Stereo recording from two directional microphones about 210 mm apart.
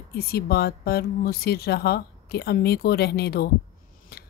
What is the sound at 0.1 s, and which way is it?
Speech, 45° left (ahead or behind).